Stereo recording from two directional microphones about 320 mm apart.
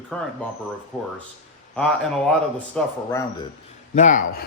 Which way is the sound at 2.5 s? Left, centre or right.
Centre.